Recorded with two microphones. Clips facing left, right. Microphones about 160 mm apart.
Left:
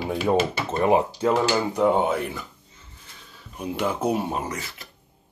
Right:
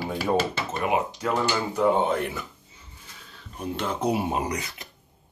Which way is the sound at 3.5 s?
10° left (ahead or behind).